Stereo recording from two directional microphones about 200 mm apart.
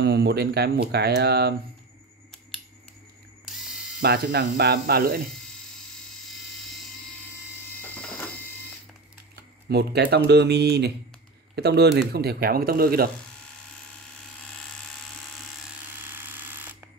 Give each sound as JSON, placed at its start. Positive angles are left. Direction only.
{"t": 0.0, "sound": "speech", "side_deg": -55}
{"t": 4.0, "sound": "speech", "side_deg": -55}
{"t": 9.3, "sound": "speech", "side_deg": -55}
{"t": 16.0, "sound": "a sound", "side_deg": -10}